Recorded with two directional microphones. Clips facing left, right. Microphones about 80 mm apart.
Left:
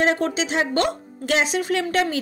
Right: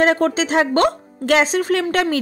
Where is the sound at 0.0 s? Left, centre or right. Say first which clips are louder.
Right 5 dB; right.